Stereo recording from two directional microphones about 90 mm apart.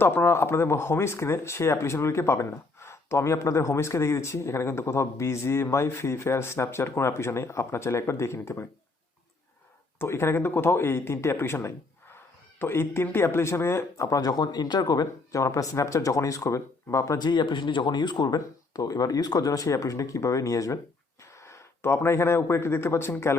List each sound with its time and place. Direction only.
0.0 s speech: 25° left (ahead or behind)
10.0 s speech: 30° left (ahead or behind)
17.2 s speech: 55° left (ahead or behind); by 23.1 s 30° left (ahead or behind)